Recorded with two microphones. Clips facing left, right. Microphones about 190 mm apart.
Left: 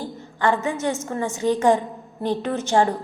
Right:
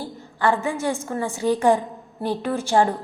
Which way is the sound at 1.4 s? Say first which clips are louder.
Even; 10° right (ahead or behind).